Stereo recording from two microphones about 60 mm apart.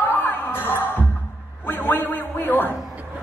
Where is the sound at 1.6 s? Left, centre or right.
Left.